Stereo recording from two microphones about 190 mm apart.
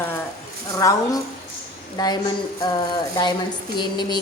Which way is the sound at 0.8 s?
15° left (ahead or behind).